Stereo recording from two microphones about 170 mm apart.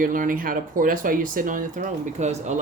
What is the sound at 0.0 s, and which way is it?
Speech, 55° right (ahead or behind).